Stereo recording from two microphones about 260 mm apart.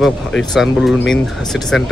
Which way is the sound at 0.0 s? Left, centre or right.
Centre.